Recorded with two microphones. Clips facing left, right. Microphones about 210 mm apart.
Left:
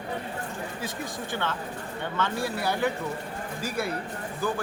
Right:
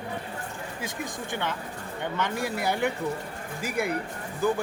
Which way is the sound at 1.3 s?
15° right (ahead or behind).